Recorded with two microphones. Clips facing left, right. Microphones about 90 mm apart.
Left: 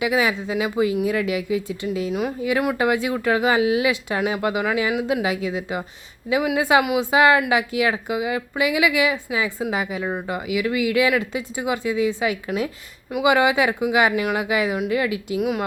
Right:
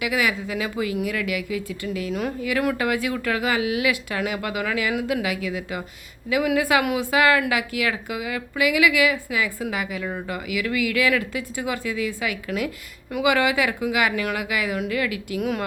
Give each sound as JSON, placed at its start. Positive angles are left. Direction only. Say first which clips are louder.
{"t": 0.0, "sound": "speech", "louder": "left 3 dB", "side_deg": 25}
{"t": 15.4, "sound": "speech", "louder": "left 2 dB", "side_deg": 5}